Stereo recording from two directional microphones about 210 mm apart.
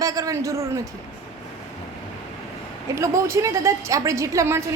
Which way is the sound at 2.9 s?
15° right (ahead or behind).